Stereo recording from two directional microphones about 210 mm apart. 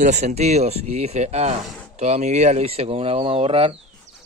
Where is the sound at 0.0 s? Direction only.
30° right (ahead or behind).